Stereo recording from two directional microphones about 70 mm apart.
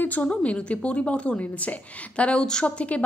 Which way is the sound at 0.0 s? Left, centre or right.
Left.